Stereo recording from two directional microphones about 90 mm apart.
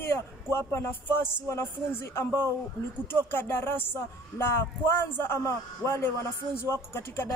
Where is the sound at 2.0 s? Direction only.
30° left (ahead or behind).